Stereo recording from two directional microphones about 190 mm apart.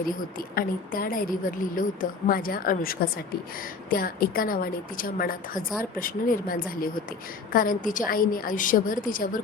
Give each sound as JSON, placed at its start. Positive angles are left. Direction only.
{"t": 0.3, "sound": "a woman's voice", "side_deg": 50}